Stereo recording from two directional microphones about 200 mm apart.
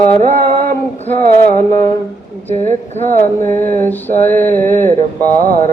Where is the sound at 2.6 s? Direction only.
35° right (ahead or behind).